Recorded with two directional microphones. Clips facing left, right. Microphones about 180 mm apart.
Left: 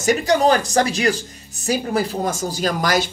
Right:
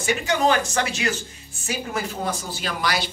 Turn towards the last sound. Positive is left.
turn(degrees=45)  # may be behind; listen again after turning